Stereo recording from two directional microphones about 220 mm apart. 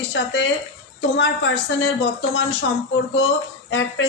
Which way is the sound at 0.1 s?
50° left (ahead or behind).